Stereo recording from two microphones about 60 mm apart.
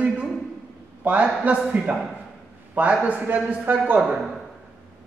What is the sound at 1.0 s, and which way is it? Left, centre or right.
Speech, right.